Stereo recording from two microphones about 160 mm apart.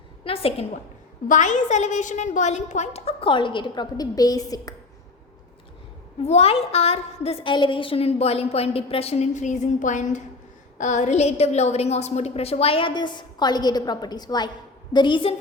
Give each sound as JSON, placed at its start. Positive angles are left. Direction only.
{"t": 0.2, "sound": "a woman's voice", "side_deg": 35}
{"t": 1.3, "sound": "a woman's voice", "side_deg": 50}
{"t": 6.2, "sound": "a woman's voice", "side_deg": 40}